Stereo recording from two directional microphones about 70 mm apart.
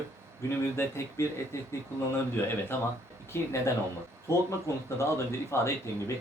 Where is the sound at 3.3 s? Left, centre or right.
Left.